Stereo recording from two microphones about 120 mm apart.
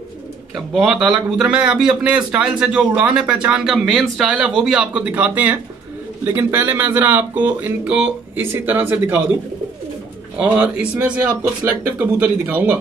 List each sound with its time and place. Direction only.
0.7 s speech: centre (ahead or behind)
10.4 s speech: 10° right (ahead or behind)